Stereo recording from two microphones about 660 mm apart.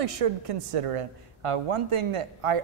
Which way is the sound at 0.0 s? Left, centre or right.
Right.